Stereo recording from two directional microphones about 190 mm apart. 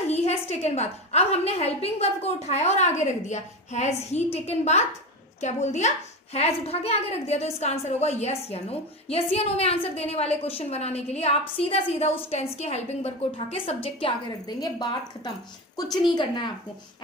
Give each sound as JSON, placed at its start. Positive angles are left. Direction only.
{"t": 0.1, "sound": "a woman's voice", "side_deg": 35}